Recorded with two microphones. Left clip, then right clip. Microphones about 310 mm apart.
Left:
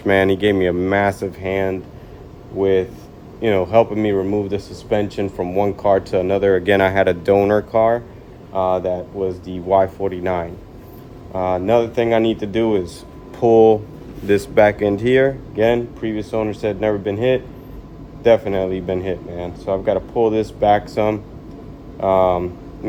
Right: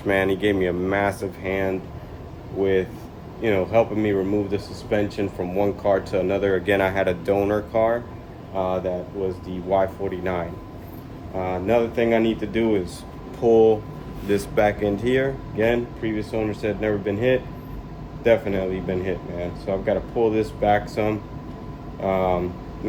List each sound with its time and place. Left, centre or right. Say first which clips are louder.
0.0 s speech: left 6 dB; left